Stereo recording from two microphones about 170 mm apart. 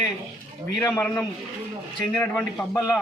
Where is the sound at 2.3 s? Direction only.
10° left (ahead or behind).